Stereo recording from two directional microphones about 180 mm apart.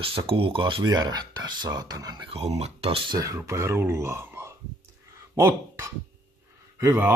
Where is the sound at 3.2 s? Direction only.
15° right (ahead or behind).